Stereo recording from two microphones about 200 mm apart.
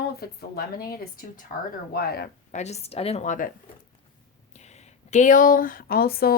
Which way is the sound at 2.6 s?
35° left (ahead or behind).